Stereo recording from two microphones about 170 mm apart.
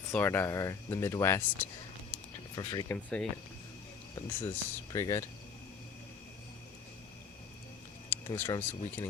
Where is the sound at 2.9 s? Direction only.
5° left (ahead or behind).